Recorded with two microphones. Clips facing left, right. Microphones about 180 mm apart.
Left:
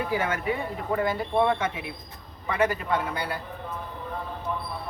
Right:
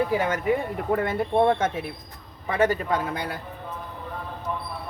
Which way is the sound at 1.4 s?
45° right (ahead or behind).